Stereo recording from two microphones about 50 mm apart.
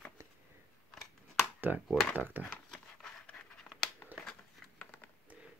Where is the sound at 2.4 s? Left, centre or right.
Centre.